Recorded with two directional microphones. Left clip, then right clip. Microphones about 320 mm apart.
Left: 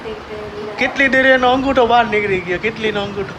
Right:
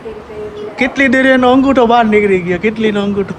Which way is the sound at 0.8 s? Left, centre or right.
Centre.